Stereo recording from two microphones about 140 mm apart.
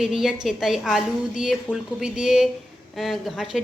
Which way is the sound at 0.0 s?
5° right (ahead or behind).